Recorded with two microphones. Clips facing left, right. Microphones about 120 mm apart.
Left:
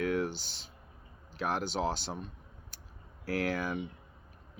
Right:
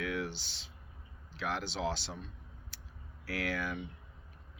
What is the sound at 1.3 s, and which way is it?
Speech, 45° left (ahead or behind).